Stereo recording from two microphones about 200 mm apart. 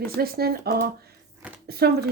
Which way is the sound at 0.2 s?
50° right (ahead or behind).